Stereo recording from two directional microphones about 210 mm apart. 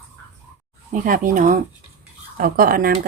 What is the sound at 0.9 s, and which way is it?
Speech, 40° right (ahead or behind).